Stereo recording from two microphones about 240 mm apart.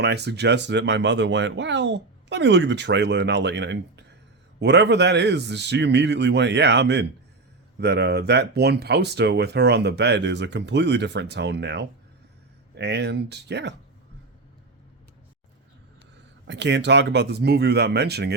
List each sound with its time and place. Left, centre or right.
0.0 s speech: right
16.5 s speech: right